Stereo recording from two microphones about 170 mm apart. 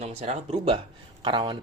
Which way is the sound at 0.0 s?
40° right (ahead or behind).